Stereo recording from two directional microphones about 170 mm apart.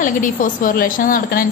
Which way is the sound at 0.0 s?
50° left (ahead or behind).